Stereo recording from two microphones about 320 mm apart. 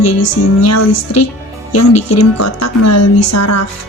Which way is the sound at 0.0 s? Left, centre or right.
Left.